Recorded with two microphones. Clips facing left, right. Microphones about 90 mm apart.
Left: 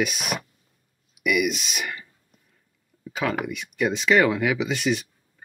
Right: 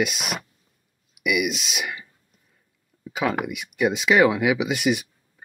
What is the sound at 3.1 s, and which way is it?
Speech, 10° right (ahead or behind).